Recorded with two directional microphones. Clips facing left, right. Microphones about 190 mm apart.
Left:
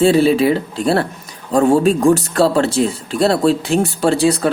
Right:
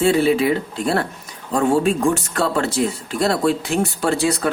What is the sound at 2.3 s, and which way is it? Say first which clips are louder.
Speech: left 6 dB; 30° left (ahead or behind).